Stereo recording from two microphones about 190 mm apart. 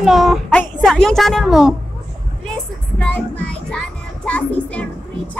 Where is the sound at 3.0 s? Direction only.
5° left (ahead or behind).